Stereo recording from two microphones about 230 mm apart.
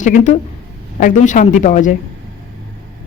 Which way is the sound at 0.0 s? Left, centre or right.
Left.